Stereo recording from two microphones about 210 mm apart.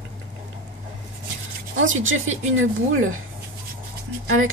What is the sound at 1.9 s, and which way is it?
A woman's voice, 70° right (ahead or behind).